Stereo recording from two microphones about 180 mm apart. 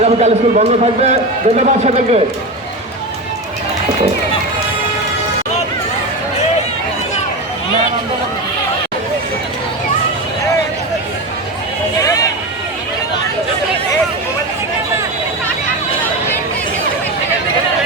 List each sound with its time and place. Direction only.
0.0 s a man's voice: 35° right (ahead or behind)
11.9 s vehicle: 20° left (ahead or behind)